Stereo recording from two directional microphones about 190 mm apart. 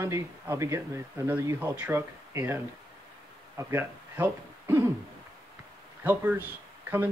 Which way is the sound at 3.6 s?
10° right (ahead or behind).